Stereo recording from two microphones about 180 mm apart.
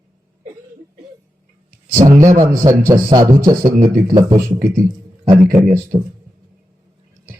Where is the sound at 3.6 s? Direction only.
50° right (ahead or behind).